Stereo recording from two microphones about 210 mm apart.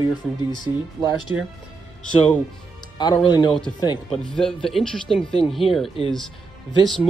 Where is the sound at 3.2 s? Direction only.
20° left (ahead or behind).